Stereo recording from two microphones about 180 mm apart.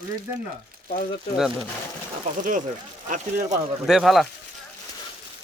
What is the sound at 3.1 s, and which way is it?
Speech, 45° right (ahead or behind).